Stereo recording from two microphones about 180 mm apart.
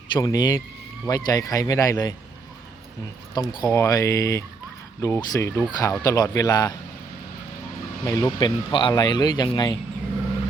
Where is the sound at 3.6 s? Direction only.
20° left (ahead or behind).